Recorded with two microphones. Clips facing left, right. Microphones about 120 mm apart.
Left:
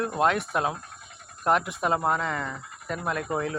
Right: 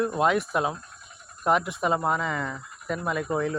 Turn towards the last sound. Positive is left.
turn(degrees=0)  # may be behind; listen again after turning